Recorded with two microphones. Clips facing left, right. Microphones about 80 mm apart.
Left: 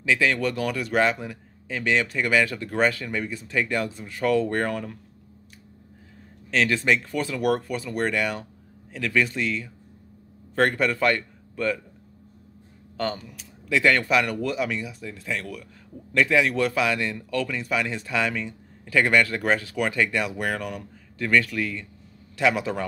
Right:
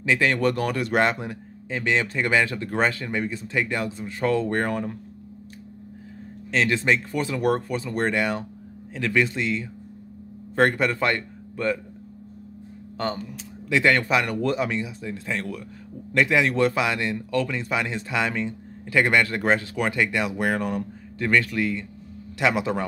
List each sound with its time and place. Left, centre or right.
0.2 s speech: right
1.7 s speech: right
6.5 s speech: right
12.9 s speech: right